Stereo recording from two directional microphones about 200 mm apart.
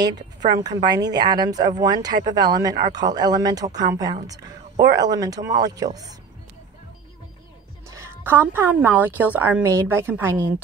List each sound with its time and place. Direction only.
0.0 s a woman's voice: 20° right (ahead or behind)
7.9 s a woman's voice: 10° right (ahead or behind)